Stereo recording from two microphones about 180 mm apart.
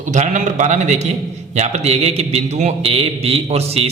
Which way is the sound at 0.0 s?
45° right (ahead or behind).